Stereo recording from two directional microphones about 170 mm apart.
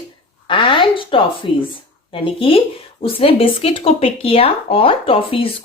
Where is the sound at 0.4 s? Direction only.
30° left (ahead or behind).